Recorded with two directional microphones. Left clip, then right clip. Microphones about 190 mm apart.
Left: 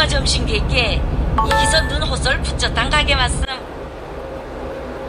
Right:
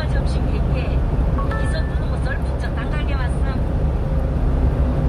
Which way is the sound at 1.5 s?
60° left (ahead or behind).